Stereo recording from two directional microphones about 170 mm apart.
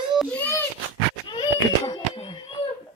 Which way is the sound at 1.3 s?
25° left (ahead or behind).